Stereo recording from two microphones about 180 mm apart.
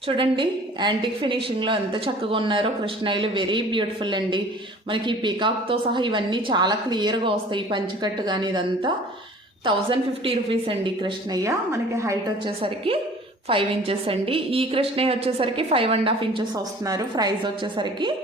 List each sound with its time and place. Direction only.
0.2 s a woman's voice: 25° right (ahead or behind)
12.6 s a woman's voice: 30° right (ahead or behind)